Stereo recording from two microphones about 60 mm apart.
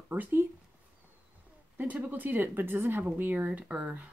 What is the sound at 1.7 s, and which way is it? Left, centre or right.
Speech, right.